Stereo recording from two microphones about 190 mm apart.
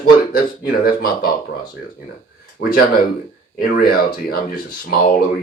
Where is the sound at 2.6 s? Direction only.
50° left (ahead or behind).